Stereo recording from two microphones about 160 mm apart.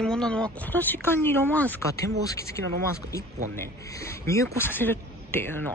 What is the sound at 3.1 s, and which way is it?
Speech, 20° left (ahead or behind).